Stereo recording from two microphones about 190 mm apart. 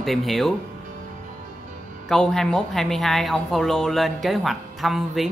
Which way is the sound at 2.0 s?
5° left (ahead or behind).